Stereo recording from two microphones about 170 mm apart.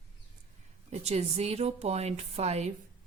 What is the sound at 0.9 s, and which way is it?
Speech, 40° right (ahead or behind).